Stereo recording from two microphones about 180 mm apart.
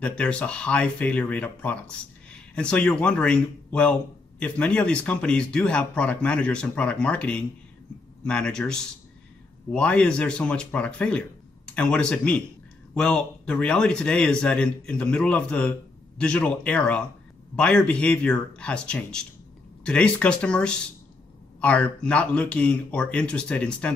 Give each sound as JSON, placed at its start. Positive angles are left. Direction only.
{"t": 0.0, "sound": "speech", "side_deg": 5}